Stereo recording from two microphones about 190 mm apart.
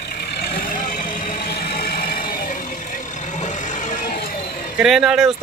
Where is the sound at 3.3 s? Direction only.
40° left (ahead or behind).